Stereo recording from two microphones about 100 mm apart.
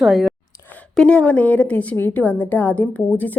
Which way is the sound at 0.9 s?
10° left (ahead or behind).